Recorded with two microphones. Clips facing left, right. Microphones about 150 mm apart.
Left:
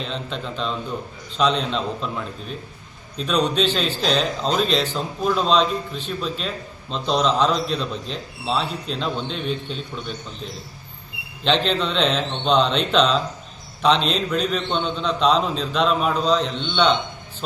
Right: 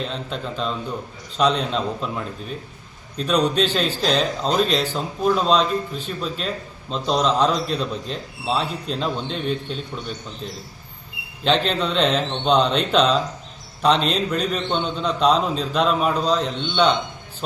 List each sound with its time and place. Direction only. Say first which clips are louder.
0.1 s a man's voice: even; 5° right (ahead or behind)
3.2 s a man's voice: right 1 dB; 5° right (ahead or behind)
11.4 s a man's voice: even; 5° right (ahead or behind)